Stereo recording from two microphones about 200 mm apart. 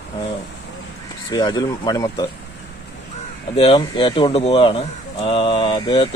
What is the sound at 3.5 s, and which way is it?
Speech, 25° left (ahead or behind).